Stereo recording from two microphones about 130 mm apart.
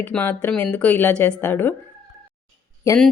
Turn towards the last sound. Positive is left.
turn(degrees=25)  # may be behind; listen again after turning